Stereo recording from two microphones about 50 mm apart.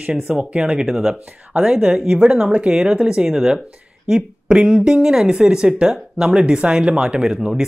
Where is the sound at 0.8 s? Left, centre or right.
Centre.